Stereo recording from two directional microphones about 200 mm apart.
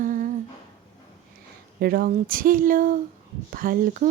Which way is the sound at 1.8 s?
50° right (ahead or behind).